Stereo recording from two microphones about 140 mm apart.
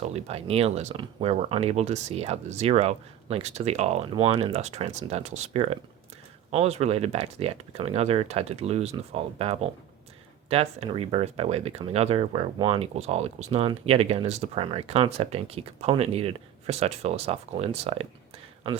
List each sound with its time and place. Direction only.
0.0 s speech: 50° right (ahead or behind)